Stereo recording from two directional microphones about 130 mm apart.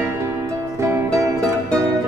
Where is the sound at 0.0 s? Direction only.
20° right (ahead or behind).